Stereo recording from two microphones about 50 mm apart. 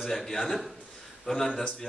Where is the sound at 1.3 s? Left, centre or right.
Centre.